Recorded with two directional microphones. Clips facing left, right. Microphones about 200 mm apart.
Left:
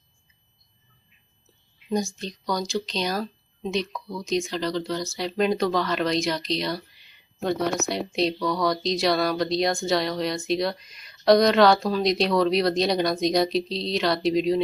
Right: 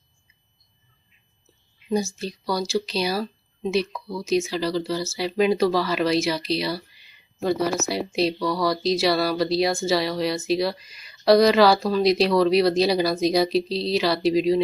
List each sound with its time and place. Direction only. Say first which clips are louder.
1.9 s speech: right 2 dB; 5° right (ahead or behind)